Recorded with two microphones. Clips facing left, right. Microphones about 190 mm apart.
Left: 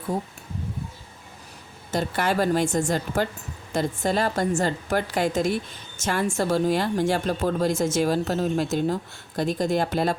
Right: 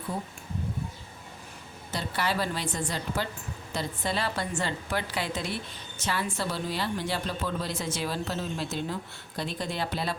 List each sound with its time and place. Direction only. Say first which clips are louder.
1.9 s a woman's voice: left 6 dB; 45° left (ahead or behind)